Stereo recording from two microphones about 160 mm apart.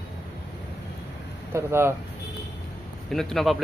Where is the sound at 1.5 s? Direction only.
15° right (ahead or behind).